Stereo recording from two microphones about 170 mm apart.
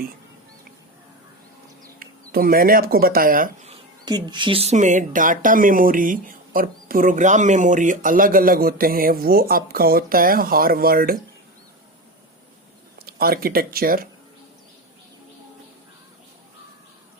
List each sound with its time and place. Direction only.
2.0 s speech: 60° right (ahead or behind)
4.0 s speech: 25° right (ahead or behind); by 11.2 s 60° right (ahead or behind)
13.0 s speech: 65° right (ahead or behind)